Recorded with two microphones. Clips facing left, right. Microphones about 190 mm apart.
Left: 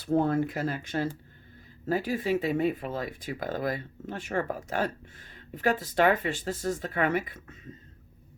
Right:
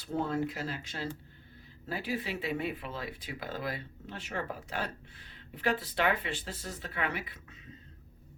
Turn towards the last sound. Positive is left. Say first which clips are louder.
# left 6 dB
turn(degrees=50)  # may be behind; listen again after turning